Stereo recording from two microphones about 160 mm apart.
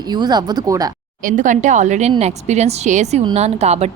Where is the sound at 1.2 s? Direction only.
55° right (ahead or behind).